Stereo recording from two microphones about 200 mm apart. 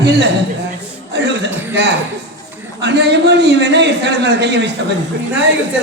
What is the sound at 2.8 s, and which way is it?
A man's voice, 60° right (ahead or behind).